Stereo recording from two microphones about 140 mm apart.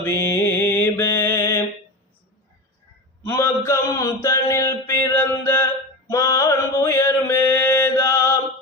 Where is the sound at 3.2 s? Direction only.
20° left (ahead or behind).